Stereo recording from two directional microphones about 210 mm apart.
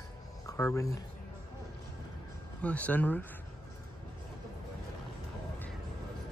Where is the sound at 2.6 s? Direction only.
5° left (ahead or behind).